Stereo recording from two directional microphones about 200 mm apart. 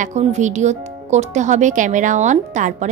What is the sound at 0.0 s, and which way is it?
A woman's voice, 35° right (ahead or behind).